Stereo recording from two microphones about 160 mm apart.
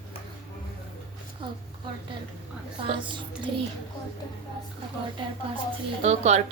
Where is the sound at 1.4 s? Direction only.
30° right (ahead or behind).